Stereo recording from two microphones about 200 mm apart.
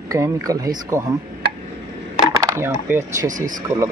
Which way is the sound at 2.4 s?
15° right (ahead or behind).